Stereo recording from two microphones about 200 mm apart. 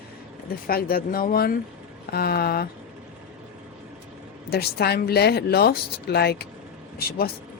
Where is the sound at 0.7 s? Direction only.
50° left (ahead or behind).